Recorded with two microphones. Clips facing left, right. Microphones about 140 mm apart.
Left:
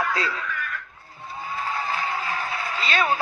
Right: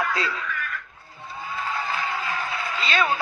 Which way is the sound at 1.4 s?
35° left (ahead or behind).